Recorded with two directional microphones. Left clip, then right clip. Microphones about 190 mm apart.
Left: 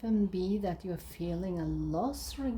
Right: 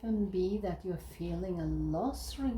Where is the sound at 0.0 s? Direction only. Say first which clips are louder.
Even; 45° left (ahead or behind).